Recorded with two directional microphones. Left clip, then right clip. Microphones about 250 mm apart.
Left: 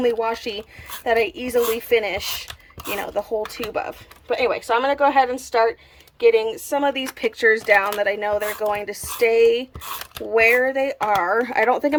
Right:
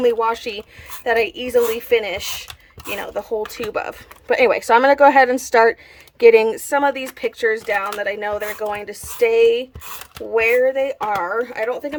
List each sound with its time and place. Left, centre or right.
0.0 s speech: centre